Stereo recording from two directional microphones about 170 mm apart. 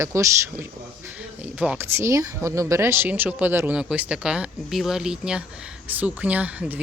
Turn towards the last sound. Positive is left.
turn(degrees=-10)  # may be behind; listen again after turning